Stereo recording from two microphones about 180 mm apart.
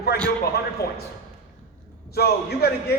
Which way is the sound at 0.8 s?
60° left (ahead or behind).